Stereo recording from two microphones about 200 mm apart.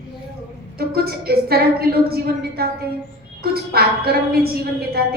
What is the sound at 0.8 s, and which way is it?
A woman's voice, 50° right (ahead or behind).